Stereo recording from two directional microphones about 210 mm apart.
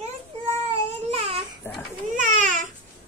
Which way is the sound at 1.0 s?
30° right (ahead or behind).